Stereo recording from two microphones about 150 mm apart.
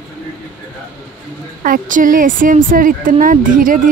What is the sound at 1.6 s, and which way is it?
Speech, 65° right (ahead or behind).